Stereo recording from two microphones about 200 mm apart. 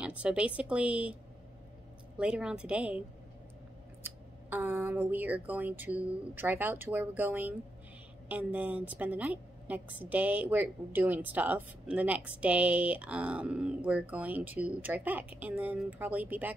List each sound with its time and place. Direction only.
0.0 s a woman's voice: 5° right (ahead or behind)
2.1 s a woman's voice: 5° right (ahead or behind)
4.0 s a woman's voice: 10° right (ahead or behind)